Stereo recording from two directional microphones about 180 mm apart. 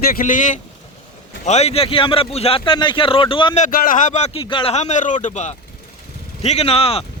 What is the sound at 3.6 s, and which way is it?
Speech, 50° left (ahead or behind).